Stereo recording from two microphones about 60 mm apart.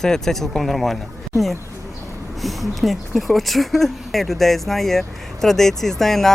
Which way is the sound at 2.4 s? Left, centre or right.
Centre.